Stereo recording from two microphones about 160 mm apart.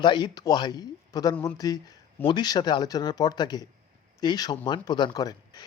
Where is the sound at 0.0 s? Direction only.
25° left (ahead or behind).